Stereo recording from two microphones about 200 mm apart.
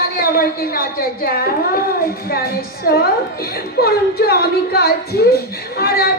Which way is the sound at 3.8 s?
50° left (ahead or behind).